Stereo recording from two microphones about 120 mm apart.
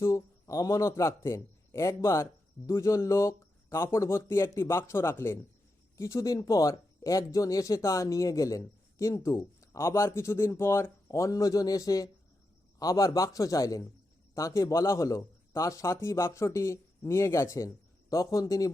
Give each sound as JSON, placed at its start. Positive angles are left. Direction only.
{"t": 0.0, "sound": "a man's voice", "side_deg": 25}